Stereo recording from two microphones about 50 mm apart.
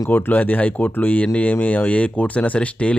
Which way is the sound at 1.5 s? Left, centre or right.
Left.